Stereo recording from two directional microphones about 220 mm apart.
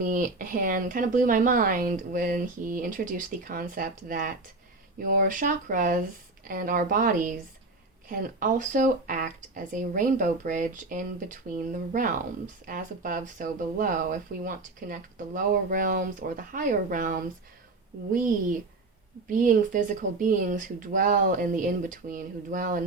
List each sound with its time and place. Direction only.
0.0 s speech: 35° right (ahead or behind)
19.3 s speech: 35° right (ahead or behind)